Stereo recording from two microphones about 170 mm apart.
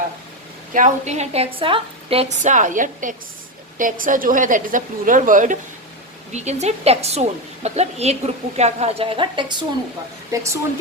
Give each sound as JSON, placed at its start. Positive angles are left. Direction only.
{"t": 0.7, "sound": "a woman's voice", "side_deg": -45}
{"t": 10.3, "sound": "speech", "side_deg": -15}